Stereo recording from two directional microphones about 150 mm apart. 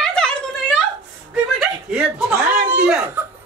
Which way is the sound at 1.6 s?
5° right (ahead or behind).